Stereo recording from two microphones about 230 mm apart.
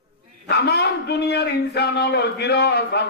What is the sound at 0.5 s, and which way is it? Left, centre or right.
A man's voice, left.